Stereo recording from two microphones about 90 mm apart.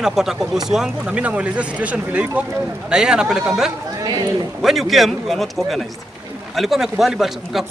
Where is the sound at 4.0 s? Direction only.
40° right (ahead or behind).